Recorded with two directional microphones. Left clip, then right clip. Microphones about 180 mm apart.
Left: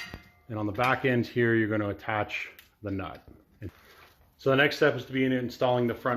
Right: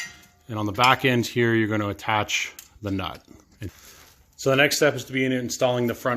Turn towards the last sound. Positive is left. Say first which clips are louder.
# right 3 dB
turn(degrees=-45)  # may be behind; listen again after turning